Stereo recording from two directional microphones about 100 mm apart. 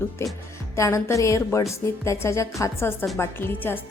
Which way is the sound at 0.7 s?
30° left (ahead or behind).